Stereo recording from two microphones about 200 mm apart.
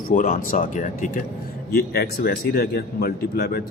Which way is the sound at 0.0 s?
45° left (ahead or behind).